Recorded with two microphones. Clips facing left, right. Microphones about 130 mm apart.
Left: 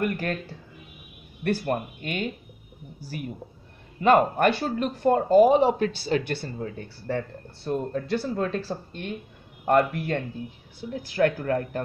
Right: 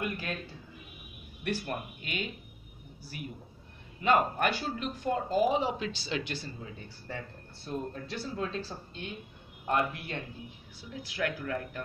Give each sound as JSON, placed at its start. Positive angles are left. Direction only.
{"t": 0.0, "sound": "speech", "side_deg": 50}
{"t": 1.5, "sound": "speech", "side_deg": 50}
{"t": 4.0, "sound": "speech", "side_deg": 55}
{"t": 6.3, "sound": "speech", "side_deg": 65}
{"t": 9.7, "sound": "speech", "side_deg": 60}